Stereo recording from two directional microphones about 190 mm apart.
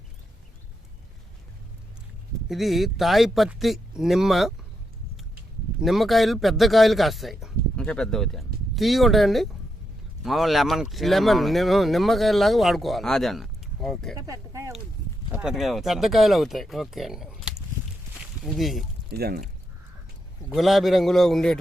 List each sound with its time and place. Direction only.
2.5 s speech: centre (ahead or behind)
5.8 s speech: centre (ahead or behind)
14.2 s speech: 15° right (ahead or behind)
15.3 s speech: 5° right (ahead or behind)
19.1 s speech: 55° right (ahead or behind)
20.5 s speech: centre (ahead or behind)